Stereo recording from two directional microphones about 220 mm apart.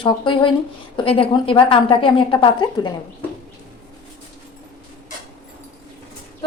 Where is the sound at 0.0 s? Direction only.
20° left (ahead or behind).